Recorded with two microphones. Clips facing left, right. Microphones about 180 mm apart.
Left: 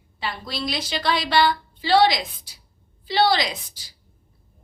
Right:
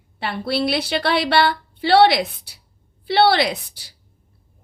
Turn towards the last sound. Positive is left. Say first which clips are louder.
# right 6 dB
turn(degrees=-65)  # may be behind; listen again after turning